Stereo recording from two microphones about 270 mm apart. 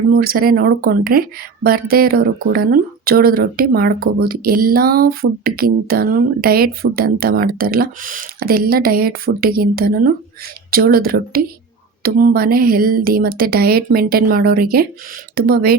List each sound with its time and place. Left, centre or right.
0.1 s speech: right